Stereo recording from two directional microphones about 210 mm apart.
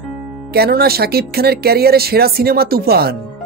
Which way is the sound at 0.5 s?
45° right (ahead or behind).